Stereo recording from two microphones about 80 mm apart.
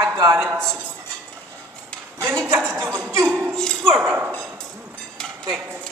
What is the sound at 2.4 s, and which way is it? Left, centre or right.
A woman's voice, right.